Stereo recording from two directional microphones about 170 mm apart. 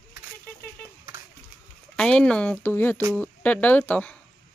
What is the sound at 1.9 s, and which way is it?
Speech, 5° left (ahead or behind).